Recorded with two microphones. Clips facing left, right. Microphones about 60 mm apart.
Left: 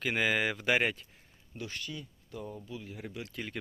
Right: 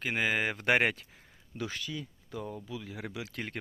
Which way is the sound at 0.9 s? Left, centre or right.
Right.